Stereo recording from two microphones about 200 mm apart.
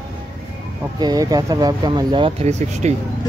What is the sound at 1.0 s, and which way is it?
Speech, 20° right (ahead or behind).